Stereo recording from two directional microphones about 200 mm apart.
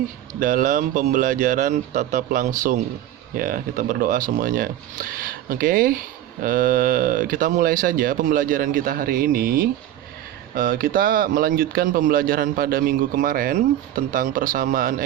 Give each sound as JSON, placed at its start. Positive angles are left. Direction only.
{"t": 0.3, "sound": "speech", "side_deg": -40}